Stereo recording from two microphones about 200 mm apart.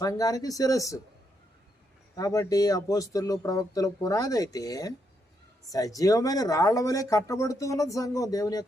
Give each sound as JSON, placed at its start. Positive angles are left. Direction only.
{"t": 0.0, "sound": "speech", "side_deg": 15}
{"t": 2.1, "sound": "speech", "side_deg": 15}